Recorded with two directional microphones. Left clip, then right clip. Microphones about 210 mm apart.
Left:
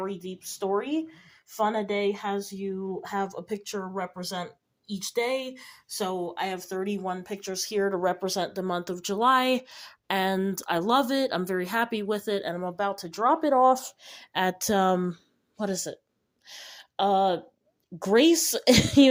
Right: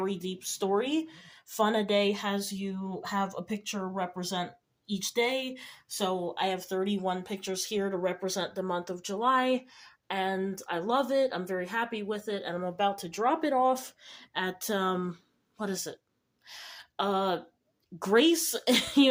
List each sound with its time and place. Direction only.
0.0 s speech: centre (ahead or behind); by 12.5 s 45° left (ahead or behind)
12.5 s speech: 25° left (ahead or behind)
14.0 s speech: 35° left (ahead or behind)
16.5 s a sound: 25° left (ahead or behind)
18.0 s speech: 25° left (ahead or behind)